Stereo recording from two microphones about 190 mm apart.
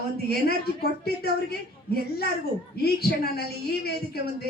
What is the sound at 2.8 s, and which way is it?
A woman's voice, 55° left (ahead or behind).